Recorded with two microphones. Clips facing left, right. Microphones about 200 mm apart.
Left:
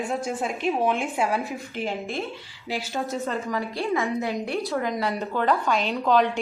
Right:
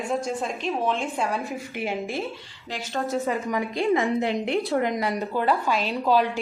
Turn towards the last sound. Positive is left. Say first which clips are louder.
# left 1 dB
turn(degrees=-5)  # may be behind; listen again after turning